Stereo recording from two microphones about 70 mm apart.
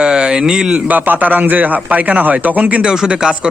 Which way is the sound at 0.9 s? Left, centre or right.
Right.